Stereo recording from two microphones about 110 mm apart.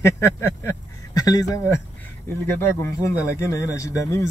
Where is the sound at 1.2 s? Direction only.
35° left (ahead or behind).